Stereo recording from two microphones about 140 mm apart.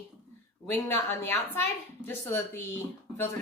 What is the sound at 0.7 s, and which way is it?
Speech, 15° left (ahead or behind).